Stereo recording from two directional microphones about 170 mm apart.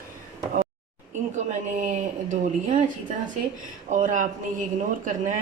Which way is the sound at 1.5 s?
45° right (ahead or behind).